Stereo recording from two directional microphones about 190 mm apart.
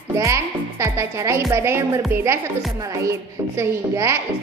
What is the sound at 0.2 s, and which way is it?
A woman's voice, 15° right (ahead or behind).